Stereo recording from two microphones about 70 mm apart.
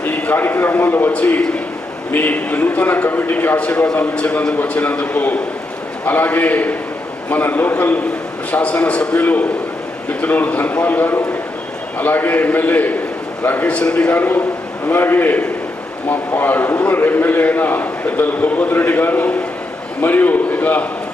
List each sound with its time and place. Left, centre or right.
0.0 s a man's voice: left